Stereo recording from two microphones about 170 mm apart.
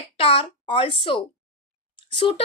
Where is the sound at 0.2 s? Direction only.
30° left (ahead or behind).